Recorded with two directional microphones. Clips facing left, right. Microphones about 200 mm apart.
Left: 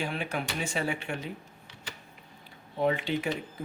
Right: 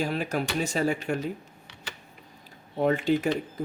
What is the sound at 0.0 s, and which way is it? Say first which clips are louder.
Speech: right 5 dB; 40° right (ahead or behind).